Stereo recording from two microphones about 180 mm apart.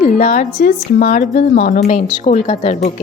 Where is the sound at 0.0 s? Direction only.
45° left (ahead or behind).